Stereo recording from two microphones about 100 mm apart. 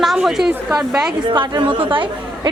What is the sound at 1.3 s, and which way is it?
Speech, 55° right (ahead or behind).